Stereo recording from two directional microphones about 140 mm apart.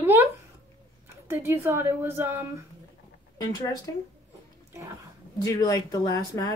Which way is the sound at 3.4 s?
30° left (ahead or behind).